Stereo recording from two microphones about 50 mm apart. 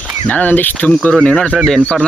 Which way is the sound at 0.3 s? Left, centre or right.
Left.